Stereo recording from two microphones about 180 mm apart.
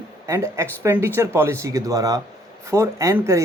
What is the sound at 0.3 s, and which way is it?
Speech, 15° right (ahead or behind).